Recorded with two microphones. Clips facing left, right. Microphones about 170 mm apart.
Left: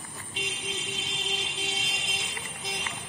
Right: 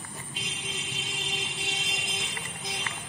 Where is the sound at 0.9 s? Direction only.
Centre (ahead or behind).